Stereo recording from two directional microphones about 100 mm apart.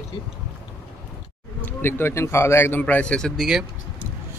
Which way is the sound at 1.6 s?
20° left (ahead or behind).